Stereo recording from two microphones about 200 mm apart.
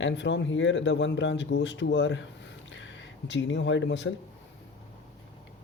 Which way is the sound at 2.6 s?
65° left (ahead or behind).